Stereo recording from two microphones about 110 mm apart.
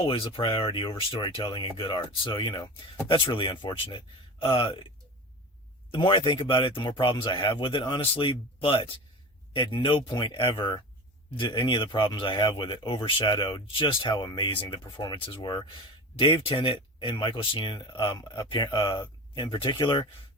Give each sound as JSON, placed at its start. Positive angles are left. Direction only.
{"t": 0.0, "sound": "speech", "side_deg": 50}
{"t": 5.9, "sound": "speech", "side_deg": 50}